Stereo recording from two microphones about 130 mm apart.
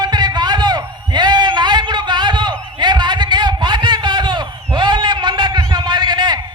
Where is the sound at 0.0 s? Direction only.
35° right (ahead or behind).